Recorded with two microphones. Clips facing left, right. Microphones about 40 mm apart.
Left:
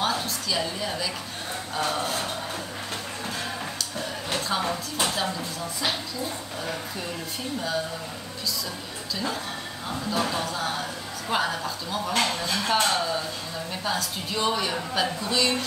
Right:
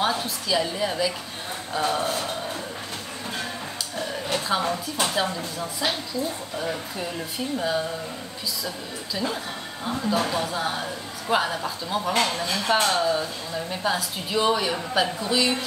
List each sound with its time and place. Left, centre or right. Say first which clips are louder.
0.0 s speech: right 2 dB; centre
4.5 s speech: right 3 dB; centre
7.5 s speech: right 3 dB; centre
9.1 s speech: right 1 dB; centre